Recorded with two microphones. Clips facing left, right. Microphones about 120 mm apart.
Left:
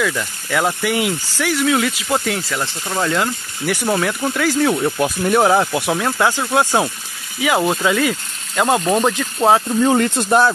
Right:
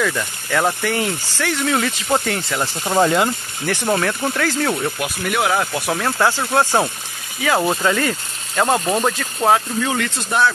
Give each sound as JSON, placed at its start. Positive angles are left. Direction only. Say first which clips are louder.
{"t": 0.5, "sound": "speech", "louder": "left 1 dB", "side_deg": 5}
{"t": 2.8, "sound": "speech", "louder": "right 6 dB", "side_deg": -20}
{"t": 3.6, "sound": "speech", "louder": "left 1 dB", "side_deg": 5}
{"t": 4.9, "sound": "speech", "louder": "left 6 dB", "side_deg": 30}
{"t": 5.9, "sound": "speech", "louder": "right 2 dB", "side_deg": 10}
{"t": 9.1, "sound": "speech", "louder": "left 2 dB", "side_deg": 20}
{"t": 9.8, "sound": "speech", "louder": "left 7 dB", "side_deg": 35}